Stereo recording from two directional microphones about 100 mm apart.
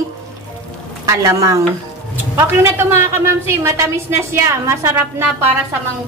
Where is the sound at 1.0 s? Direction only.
35° right (ahead or behind).